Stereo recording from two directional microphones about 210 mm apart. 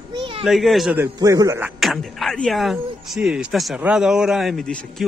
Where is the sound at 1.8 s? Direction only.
Centre (ahead or behind).